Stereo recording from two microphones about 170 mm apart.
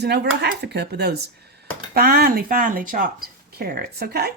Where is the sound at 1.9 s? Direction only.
60° right (ahead or behind).